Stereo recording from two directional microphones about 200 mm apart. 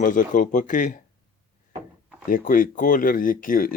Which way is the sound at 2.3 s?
45° left (ahead or behind).